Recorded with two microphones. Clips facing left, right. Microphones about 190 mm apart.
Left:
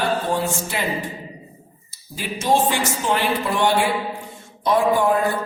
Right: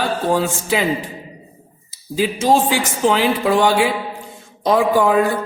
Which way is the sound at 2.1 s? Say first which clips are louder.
Right 5 dB; 90° right.